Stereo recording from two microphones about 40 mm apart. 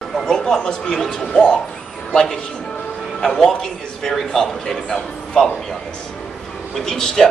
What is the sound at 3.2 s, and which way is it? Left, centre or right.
A man's voice, centre.